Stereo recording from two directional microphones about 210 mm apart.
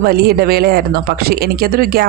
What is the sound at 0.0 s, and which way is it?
Speech, 45° right (ahead or behind).